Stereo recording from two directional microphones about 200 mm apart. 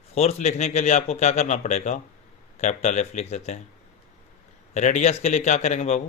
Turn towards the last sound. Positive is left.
turn(degrees=35)  # may be behind; listen again after turning